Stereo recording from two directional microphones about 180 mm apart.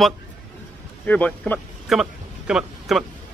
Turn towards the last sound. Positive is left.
turn(degrees=-5)  # may be behind; listen again after turning